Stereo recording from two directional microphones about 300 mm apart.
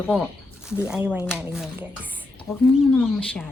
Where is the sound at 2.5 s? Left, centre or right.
Centre.